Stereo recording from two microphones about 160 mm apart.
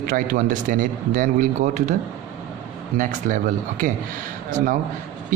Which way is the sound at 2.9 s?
55° right (ahead or behind).